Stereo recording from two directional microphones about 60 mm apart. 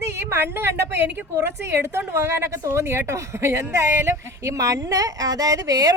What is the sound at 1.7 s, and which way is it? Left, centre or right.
A woman's voice, right.